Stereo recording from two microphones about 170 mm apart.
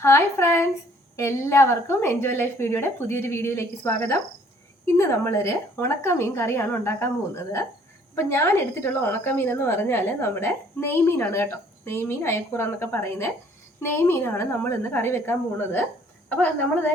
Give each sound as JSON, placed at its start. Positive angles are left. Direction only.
{"t": 0.0, "sound": "a woman's voice", "side_deg": 15}